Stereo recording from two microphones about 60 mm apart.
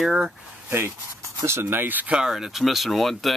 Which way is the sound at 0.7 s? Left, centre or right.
Right.